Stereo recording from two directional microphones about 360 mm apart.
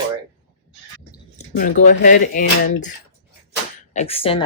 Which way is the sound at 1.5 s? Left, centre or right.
Left.